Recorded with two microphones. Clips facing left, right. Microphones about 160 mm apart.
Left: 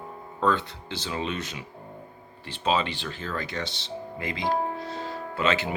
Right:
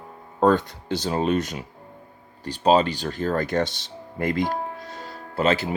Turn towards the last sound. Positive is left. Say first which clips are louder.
# right 4 dB
turn(degrees=-35)  # may be behind; listen again after turning